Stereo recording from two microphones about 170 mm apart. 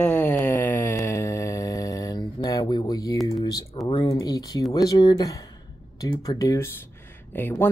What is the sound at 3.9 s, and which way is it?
Speech, 30° left (ahead or behind).